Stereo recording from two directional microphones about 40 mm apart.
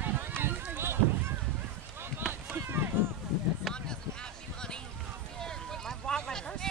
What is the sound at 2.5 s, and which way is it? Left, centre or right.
Run, right.